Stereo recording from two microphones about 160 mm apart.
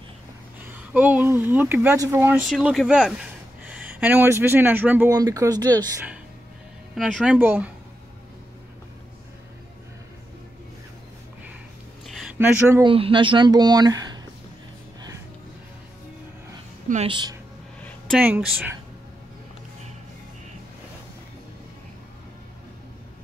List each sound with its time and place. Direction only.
0.7 s speech: 10° right (ahead or behind)
2.4 s speech: centre (ahead or behind)
5.1 s speech: 20° right (ahead or behind)
7.0 s speech: 5° right (ahead or behind)
12.1 s a sound: centre (ahead or behind)
12.4 s speech: 15° right (ahead or behind)
12.8 s speech: 30° right (ahead or behind)
17.1 s speech: 30° right (ahead or behind)
17.8 s a sound: 5° left (ahead or behind)